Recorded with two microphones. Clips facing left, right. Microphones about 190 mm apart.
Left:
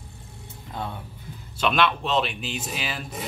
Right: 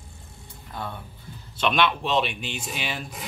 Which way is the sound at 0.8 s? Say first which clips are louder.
Left 2 dB; 20° left (ahead or behind).